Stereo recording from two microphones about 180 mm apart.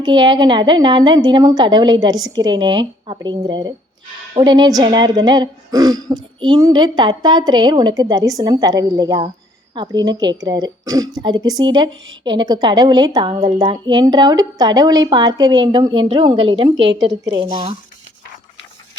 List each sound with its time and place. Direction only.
0.0 s a woman's voice: 25° right (ahead or behind)
16.7 s a woman's voice: 85° right
17.3 s speech: 30° right (ahead or behind)